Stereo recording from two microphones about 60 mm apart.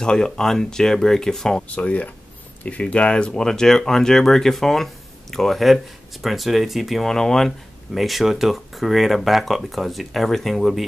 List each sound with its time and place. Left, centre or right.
0.0 s speech: centre
1.8 s speech: left; by 10.8 s centre